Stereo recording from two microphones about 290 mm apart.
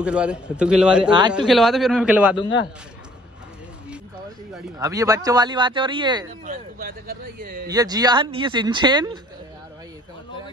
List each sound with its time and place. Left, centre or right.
0.0 s a man's voice: centre
4.7 s speech: centre
6.4 s speech: right
7.7 s speech: centre